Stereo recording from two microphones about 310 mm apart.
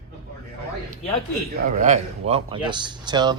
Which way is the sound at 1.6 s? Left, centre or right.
Right.